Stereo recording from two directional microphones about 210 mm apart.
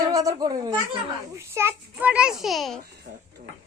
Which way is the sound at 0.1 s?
15° right (ahead or behind).